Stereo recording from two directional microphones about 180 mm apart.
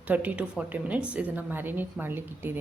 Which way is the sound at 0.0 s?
10° right (ahead or behind).